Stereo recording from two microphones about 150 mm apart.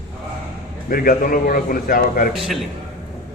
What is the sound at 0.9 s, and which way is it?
A man's voice, 70° left (ahead or behind).